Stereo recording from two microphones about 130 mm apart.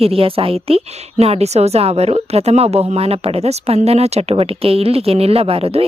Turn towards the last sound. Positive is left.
turn(degrees=-50)  # may be behind; listen again after turning